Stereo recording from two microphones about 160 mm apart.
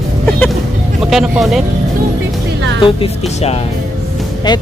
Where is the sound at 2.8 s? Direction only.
35° left (ahead or behind).